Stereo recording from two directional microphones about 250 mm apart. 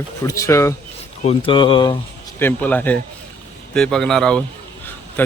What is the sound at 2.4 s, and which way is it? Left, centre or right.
Speech, centre.